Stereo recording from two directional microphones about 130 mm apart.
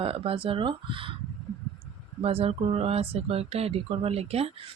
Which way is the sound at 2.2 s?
50° right (ahead or behind).